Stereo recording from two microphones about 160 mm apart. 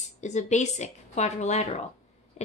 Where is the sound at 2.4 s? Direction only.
45° left (ahead or behind).